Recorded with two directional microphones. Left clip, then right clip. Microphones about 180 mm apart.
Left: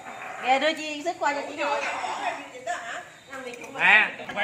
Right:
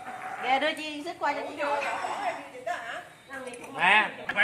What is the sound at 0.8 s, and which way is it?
Speech, 55° left (ahead or behind).